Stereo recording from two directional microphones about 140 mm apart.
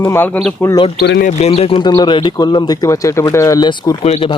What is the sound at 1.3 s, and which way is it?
Speech, 50° left (ahead or behind).